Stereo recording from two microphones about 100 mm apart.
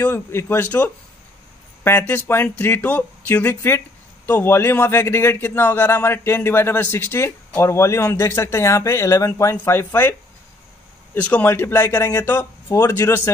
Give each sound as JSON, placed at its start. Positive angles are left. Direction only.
{"t": 0.0, "sound": "a man's voice", "side_deg": 25}
{"t": 11.1, "sound": "a man's voice", "side_deg": 15}